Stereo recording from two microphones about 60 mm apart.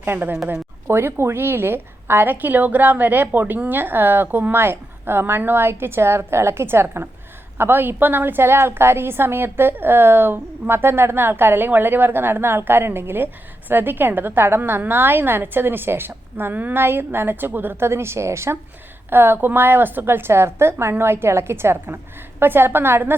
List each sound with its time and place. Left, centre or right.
0.0 s a woman's voice: right
19.1 s a woman's voice: right